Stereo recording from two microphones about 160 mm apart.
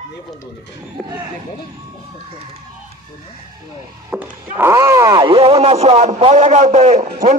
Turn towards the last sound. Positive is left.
turn(degrees=-50)  # may be behind; listen again after turning